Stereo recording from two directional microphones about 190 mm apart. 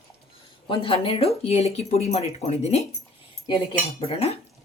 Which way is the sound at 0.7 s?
30° left (ahead or behind).